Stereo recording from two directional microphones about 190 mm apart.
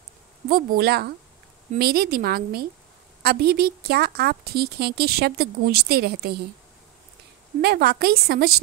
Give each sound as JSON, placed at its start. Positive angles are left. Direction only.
{"t": 0.5, "sound": "a woman's voice", "side_deg": -50}
{"t": 7.6, "sound": "a woman's voice", "side_deg": -55}